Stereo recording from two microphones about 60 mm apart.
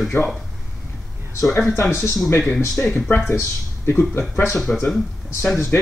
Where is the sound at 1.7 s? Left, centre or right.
Left.